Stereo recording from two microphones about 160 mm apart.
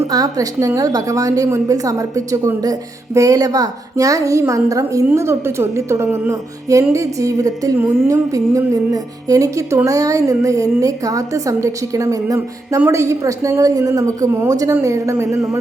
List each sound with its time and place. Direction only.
0.0 s speech: 20° right (ahead or behind)